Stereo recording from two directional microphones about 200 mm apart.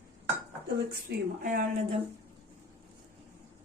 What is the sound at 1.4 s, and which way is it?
Speech, 45° right (ahead or behind).